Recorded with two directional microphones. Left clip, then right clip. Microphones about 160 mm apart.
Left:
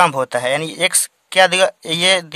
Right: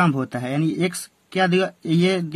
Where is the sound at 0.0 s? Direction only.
55° left (ahead or behind).